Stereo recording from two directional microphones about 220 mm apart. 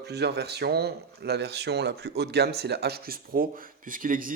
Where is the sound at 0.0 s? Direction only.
50° right (ahead or behind).